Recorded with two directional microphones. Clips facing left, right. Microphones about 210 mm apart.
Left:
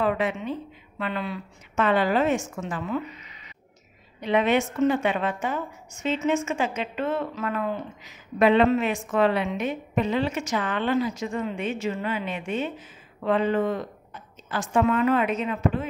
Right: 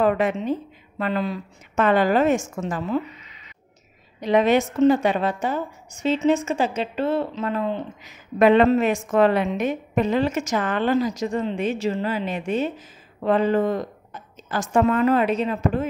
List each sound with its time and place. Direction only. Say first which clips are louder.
0.0 s a woman's voice: right 5 dB; 45° right (ahead or behind)
4.2 s a woman's voice: right 4 dB; 40° right (ahead or behind)
8.0 s a woman's voice: right 4 dB; 45° right (ahead or behind)